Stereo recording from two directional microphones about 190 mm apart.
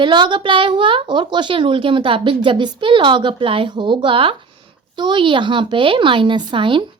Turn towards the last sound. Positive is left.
turn(degrees=-25)  # may be behind; listen again after turning